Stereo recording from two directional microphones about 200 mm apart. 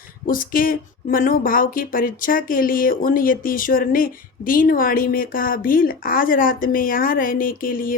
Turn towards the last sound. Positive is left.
turn(degrees=45)  # may be behind; listen again after turning